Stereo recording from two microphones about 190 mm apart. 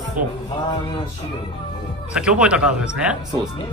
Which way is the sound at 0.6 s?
25° left (ahead or behind).